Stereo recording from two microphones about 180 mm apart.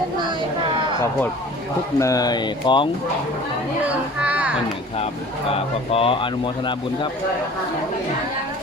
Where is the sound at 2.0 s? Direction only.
20° left (ahead or behind).